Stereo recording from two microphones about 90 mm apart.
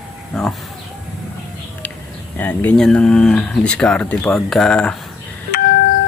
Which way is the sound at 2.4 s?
20° left (ahead or behind).